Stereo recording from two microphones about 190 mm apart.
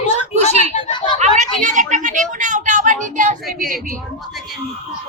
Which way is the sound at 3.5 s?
45° right (ahead or behind).